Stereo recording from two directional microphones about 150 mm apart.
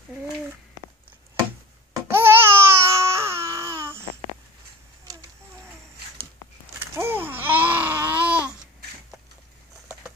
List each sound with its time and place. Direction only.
2.0 s baby cry: 15° right (ahead or behind)
5.1 s a sound: 25° right (ahead or behind)
7.0 s babbling: 15° right (ahead or behind)